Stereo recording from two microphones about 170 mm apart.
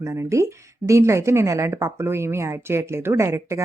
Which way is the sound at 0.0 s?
15° right (ahead or behind).